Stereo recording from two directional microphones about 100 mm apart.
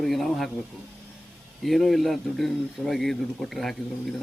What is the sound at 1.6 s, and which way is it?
A man's voice, centre (ahead or behind).